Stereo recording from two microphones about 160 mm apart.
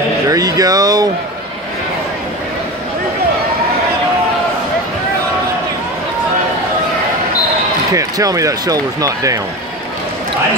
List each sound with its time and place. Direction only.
0.3 s speech: 20° right (ahead or behind)
7.9 s speech: 20° right (ahead or behind)